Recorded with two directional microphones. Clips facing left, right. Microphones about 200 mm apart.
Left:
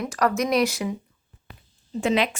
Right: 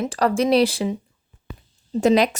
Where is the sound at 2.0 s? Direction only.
40° right (ahead or behind).